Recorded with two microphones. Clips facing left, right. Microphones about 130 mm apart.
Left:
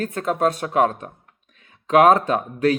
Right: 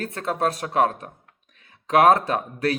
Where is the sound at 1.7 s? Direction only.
35° right (ahead or behind).